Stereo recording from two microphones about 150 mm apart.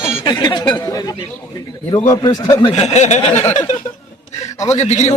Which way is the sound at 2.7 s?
50° left (ahead or behind).